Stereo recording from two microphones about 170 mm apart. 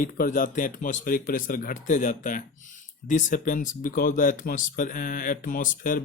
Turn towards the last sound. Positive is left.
turn(degrees=50)  # may be behind; listen again after turning